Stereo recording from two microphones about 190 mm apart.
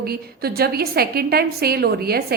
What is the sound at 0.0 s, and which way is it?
A woman's voice, 55° right (ahead or behind).